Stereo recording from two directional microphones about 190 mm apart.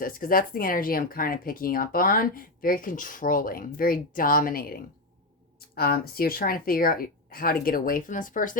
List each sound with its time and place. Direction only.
0.0 s speech: 50° left (ahead or behind)